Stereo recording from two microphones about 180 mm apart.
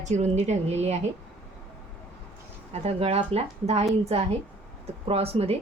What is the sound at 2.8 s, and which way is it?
A woman's voice, 35° right (ahead or behind).